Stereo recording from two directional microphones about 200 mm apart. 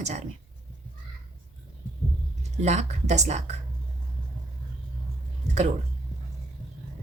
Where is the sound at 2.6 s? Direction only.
35° right (ahead or behind).